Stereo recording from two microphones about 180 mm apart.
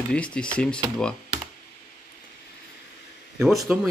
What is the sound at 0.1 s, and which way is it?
Speech, 5° left (ahead or behind).